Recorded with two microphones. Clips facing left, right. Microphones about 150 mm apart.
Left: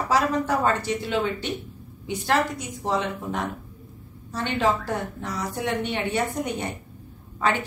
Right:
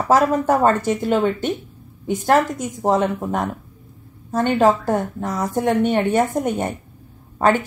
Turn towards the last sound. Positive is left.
turn(degrees=-45)  # may be behind; listen again after turning